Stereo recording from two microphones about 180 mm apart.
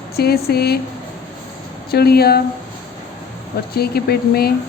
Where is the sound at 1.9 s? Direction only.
60° left (ahead or behind).